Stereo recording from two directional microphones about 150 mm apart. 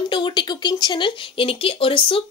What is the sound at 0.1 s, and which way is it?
Speech, 30° left (ahead or behind).